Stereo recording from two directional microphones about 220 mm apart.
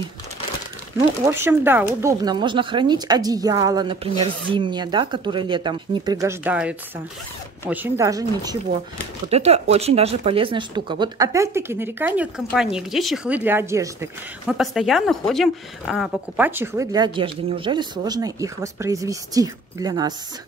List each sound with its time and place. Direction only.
0.9 s a woman's voice: 15° right (ahead or behind)
9.3 s a woman's voice: 30° right (ahead or behind); by 13.8 s 10° right (ahead or behind)
14.6 s a woman's voice: centre (ahead or behind); by 20.2 s 15° right (ahead or behind)